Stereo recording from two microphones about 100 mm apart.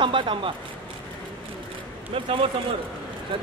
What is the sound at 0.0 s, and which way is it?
Speech, 55° right (ahead or behind).